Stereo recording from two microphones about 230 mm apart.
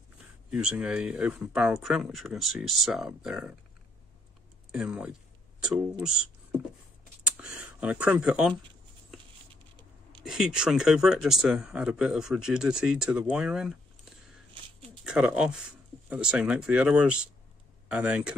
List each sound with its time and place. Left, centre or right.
0.5 s speech: centre
4.7 s speech: centre
7.2 s a sound: centre
10.2 s speech: centre